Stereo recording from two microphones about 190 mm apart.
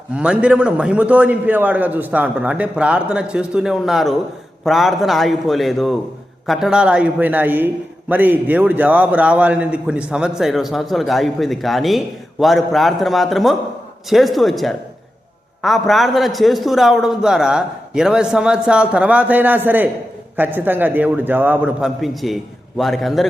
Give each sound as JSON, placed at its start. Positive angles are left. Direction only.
{"t": 0.1, "sound": "a man's voice", "side_deg": -5}